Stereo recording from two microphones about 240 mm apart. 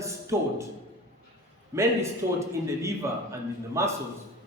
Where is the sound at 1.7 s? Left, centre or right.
Centre.